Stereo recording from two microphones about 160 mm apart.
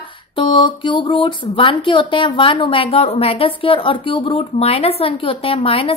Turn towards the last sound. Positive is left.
turn(degrees=35)  # may be behind; listen again after turning